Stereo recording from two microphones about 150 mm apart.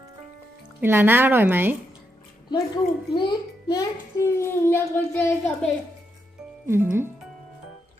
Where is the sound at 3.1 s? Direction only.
30° left (ahead or behind); by 5.4 s 15° left (ahead or behind).